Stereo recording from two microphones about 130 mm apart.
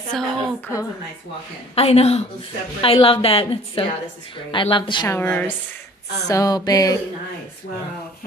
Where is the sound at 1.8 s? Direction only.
55° left (ahead or behind); by 5.0 s 40° left (ahead or behind).